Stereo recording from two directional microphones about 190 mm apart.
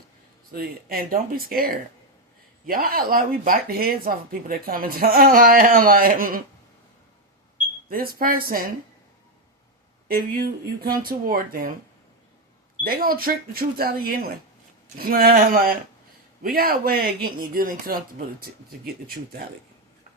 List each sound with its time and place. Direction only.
0.5 s speech: 50° right (ahead or behind)
7.9 s speech: 50° right (ahead or behind)
10.1 s speech: 50° right (ahead or behind)
12.8 s speech: 50° right (ahead or behind)